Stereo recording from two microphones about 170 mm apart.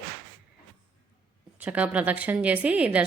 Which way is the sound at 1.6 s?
10° right (ahead or behind).